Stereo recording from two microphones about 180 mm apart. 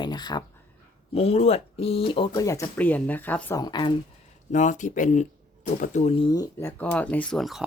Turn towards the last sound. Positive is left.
turn(degrees=0)  # may be behind; listen again after turning